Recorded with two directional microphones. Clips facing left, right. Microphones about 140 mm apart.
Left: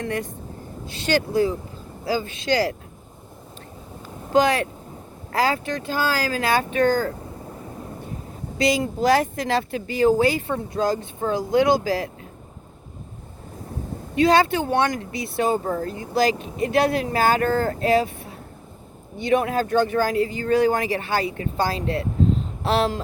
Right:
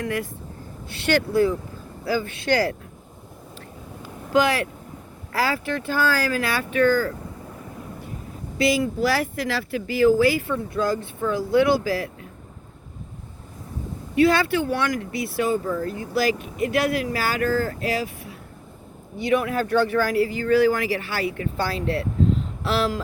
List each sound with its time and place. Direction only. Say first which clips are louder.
0.0 s speech: even; 25° left (ahead or behind)
4.3 s speech: left 2 dB; 25° left (ahead or behind)
8.5 s speech: even; 20° left (ahead or behind)
14.2 s speech: left 1 dB; 20° left (ahead or behind)
15.5 s speech: even; 45° left (ahead or behind)
15.9 s speech: left 3 dB; 20° left (ahead or behind)